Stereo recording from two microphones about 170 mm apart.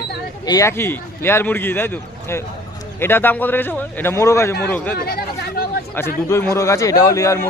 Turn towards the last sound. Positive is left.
turn(degrees=20)  # may be behind; listen again after turning